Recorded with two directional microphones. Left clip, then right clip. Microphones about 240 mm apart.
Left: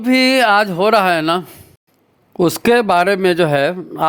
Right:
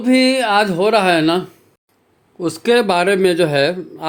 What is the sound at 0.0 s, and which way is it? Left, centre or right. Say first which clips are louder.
A man's voice: left 2 dB; left.